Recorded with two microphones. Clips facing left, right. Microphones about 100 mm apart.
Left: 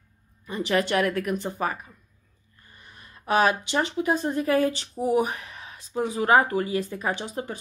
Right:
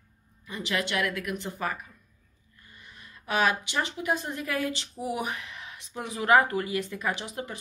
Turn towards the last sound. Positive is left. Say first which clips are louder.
# left 4 dB
turn(degrees=35)  # may be behind; listen again after turning